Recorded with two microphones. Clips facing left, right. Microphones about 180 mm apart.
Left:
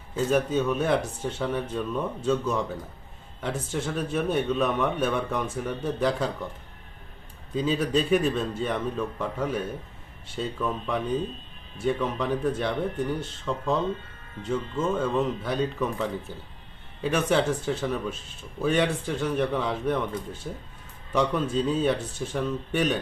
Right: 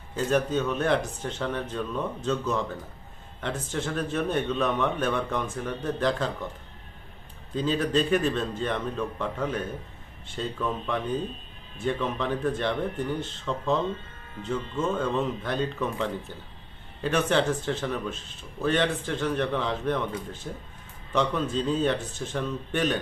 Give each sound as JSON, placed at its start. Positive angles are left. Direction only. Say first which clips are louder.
{"t": 0.1, "sound": "speech", "louder": "left 1 dB", "side_deg": 5}
{"t": 7.5, "sound": "speech", "louder": "left 1 dB", "side_deg": 5}
{"t": 14.8, "sound": "speech", "louder": "left 1 dB", "side_deg": 5}